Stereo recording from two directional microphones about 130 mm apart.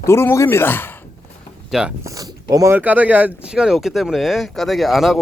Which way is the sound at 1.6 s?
5° right (ahead or behind).